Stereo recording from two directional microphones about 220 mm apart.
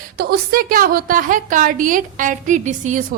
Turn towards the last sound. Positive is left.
turn(degrees=-35)  # may be behind; listen again after turning